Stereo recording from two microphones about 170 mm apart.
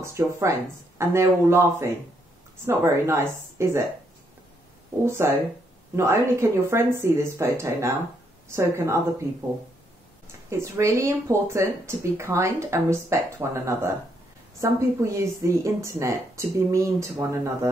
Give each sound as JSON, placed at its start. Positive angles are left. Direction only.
{"t": 0.0, "sound": "speech", "side_deg": -15}
{"t": 5.0, "sound": "speech", "side_deg": -15}
{"t": 10.5, "sound": "speech", "side_deg": -15}